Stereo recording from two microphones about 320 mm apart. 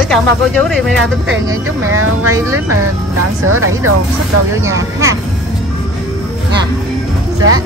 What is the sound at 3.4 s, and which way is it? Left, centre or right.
Speech, right.